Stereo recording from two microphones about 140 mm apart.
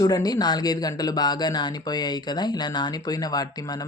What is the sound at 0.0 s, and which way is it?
Speech, 25° left (ahead or behind).